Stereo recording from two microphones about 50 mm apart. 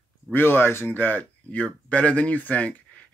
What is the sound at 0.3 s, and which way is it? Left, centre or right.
Speech, left.